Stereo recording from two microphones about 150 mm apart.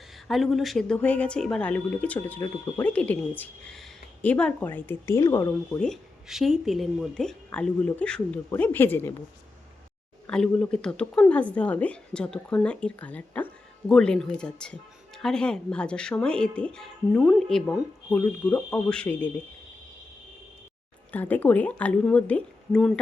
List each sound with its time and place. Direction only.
0.3 s speech: centre (ahead or behind)
10.2 s speech: 5° left (ahead or behind)
21.1 s speech: 10° left (ahead or behind)